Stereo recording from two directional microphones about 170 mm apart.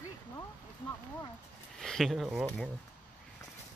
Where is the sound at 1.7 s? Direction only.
Centre (ahead or behind).